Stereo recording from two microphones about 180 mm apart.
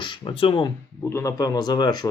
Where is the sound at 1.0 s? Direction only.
15° left (ahead or behind).